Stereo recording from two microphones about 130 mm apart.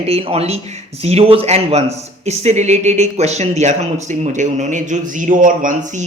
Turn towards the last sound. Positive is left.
turn(degrees=-75)  # may be behind; listen again after turning